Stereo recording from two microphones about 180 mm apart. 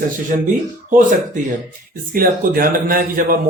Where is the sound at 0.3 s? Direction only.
55° right (ahead or behind).